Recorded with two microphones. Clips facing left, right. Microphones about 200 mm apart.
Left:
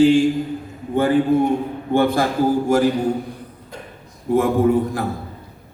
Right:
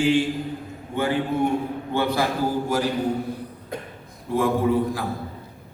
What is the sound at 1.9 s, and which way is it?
Speech, 50° left (ahead or behind).